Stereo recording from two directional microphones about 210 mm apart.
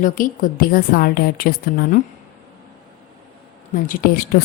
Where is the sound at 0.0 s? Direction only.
40° left (ahead or behind).